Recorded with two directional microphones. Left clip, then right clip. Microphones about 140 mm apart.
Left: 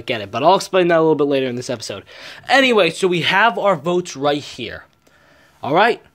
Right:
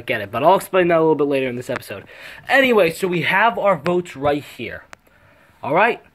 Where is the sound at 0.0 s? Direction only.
20° left (ahead or behind).